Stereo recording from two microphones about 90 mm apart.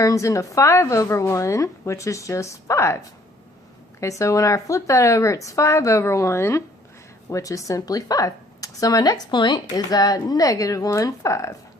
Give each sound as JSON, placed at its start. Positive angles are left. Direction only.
{"t": 0.0, "sound": "speech", "side_deg": 35}
{"t": 4.0, "sound": "speech", "side_deg": 35}